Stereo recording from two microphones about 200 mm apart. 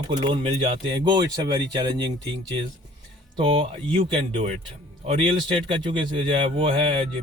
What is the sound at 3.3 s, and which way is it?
Speech, 25° right (ahead or behind).